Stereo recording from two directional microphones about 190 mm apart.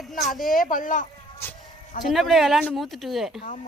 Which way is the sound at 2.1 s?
Centre (ahead or behind).